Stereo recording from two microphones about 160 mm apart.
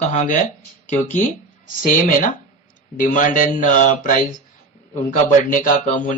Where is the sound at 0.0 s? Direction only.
45° left (ahead or behind).